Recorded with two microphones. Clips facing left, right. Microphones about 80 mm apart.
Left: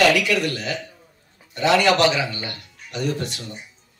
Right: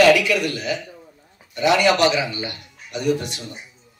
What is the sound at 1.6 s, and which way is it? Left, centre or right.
A man's voice, centre.